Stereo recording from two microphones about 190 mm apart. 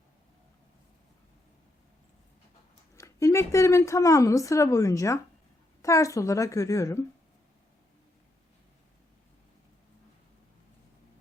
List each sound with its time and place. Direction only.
2.9 s speech: 15° left (ahead or behind)